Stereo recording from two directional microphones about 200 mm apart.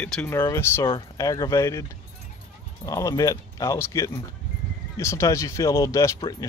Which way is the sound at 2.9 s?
15° left (ahead or behind).